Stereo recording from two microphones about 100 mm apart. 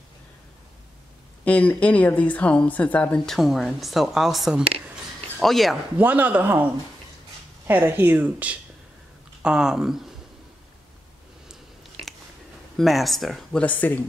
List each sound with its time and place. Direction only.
1.4 s speech: 15° left (ahead or behind)
3.3 s speech: centre (ahead or behind)
5.9 s speech: 15° right (ahead or behind)
12.7 s speech: centre (ahead or behind); by 13.9 s 15° left (ahead or behind)